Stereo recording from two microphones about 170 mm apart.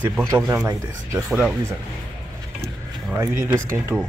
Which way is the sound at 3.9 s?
Centre (ahead or behind).